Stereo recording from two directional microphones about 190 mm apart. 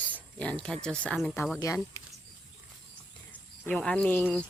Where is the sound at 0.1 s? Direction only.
5° left (ahead or behind).